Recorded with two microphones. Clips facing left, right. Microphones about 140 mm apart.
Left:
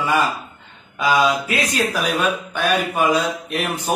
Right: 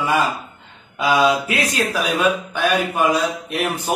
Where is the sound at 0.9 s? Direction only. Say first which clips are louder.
Right 1 dB; 10° right (ahead or behind).